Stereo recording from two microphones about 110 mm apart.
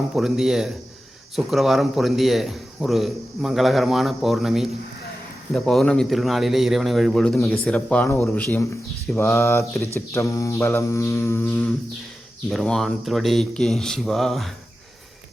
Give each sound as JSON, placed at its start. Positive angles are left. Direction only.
{"t": 0.1, "sound": "a man's voice", "side_deg": -5}
{"t": 9.1, "sound": "mantra", "side_deg": 25}
{"t": 12.5, "sound": "a man's voice", "side_deg": 0}